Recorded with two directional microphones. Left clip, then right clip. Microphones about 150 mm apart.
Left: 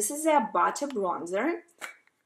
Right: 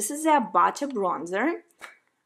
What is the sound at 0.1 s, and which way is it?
A woman's voice, 30° right (ahead or behind).